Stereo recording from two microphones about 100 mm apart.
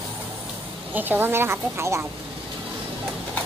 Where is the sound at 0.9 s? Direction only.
20° right (ahead or behind).